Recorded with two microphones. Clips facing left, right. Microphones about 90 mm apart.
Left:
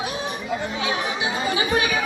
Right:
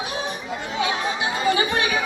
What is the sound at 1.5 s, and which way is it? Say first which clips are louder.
Chatter: right 2 dB; 15° left (ahead or behind).